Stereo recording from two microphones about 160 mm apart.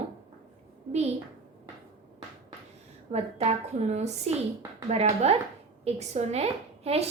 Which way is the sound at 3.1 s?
40° right (ahead or behind).